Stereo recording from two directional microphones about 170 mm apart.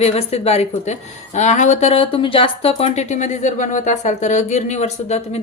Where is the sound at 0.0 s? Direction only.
40° left (ahead or behind).